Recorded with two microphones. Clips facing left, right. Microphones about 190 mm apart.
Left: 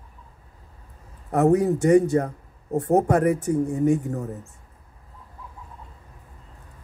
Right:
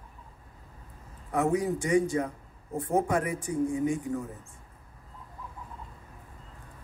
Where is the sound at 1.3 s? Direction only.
65° left (ahead or behind).